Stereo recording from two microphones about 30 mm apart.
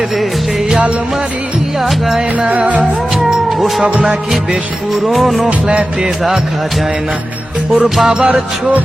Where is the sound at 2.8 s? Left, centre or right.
Centre.